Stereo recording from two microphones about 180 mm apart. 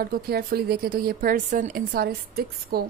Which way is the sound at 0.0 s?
55° right (ahead or behind).